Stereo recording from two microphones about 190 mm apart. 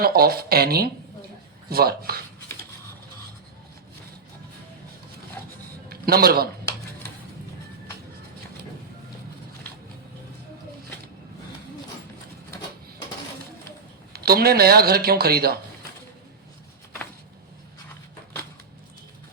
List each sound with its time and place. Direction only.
0.0 s speech: 55° right (ahead or behind)
5.9 s a man's voice: 55° right (ahead or behind)
14.1 s speech: 55° right (ahead or behind)